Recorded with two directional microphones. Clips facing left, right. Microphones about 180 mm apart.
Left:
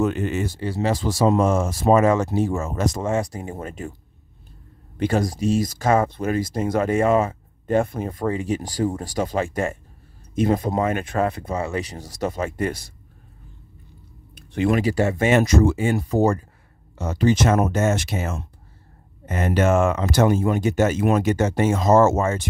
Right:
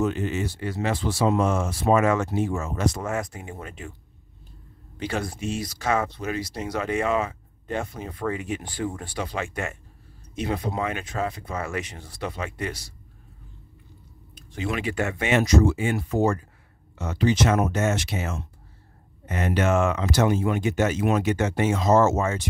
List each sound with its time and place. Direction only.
0.0 s speech: 55° left (ahead or behind)
0.6 s speech: 30° left (ahead or behind)
3.0 s speech: 30° left (ahead or behind)
4.9 s speech: 45° left (ahead or behind)
8.3 s speech: 30° left (ahead or behind)
10.3 s speech: 45° left (ahead or behind)
11.5 s speech: 30° left (ahead or behind); by 12.9 s 50° left (ahead or behind)
14.3 s a sound: 60° left (ahead or behind)
14.8 s speech: 35° left (ahead or behind); by 15.8 s 55° left (ahead or behind)
16.1 s speech: 35° left (ahead or behind)